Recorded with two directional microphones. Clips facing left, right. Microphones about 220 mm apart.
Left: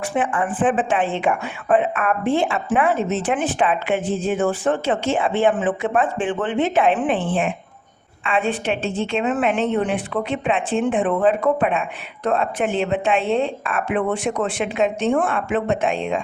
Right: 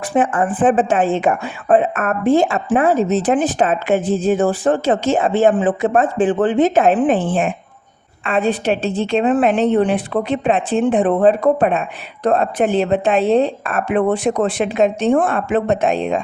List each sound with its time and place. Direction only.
0.1 s a woman's voice: 40° right (ahead or behind)
8.2 s a woman's voice: 40° right (ahead or behind)